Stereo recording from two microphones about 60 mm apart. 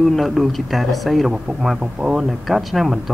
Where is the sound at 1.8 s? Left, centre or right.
Centre.